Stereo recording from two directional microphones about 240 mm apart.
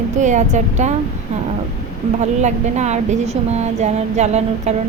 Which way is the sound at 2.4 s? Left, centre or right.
Right.